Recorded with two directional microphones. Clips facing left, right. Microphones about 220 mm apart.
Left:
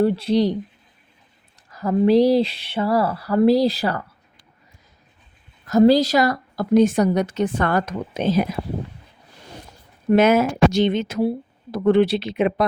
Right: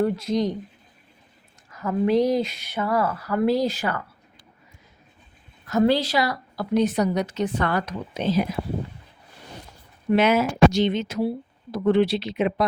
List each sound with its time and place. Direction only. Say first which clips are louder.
0.0 s speech: left 4 dB; 30° left (ahead or behind)
1.7 s speech: left 5 dB; 35° left (ahead or behind)
5.6 s a woman's voice: left 6 dB; 40° left (ahead or behind)
10.1 s a woman's voice: left 4 dB; 45° left (ahead or behind)